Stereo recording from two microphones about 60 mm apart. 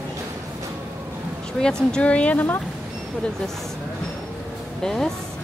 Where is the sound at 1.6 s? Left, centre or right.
Centre.